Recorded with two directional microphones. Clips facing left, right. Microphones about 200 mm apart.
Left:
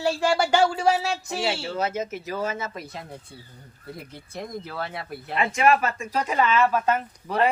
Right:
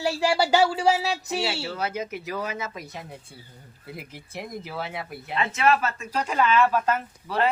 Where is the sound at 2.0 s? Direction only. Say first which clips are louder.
Left 1 dB; 40° left (ahead or behind).